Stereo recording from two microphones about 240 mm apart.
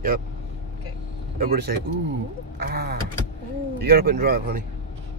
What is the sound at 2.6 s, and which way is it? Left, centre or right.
Vehicle, right.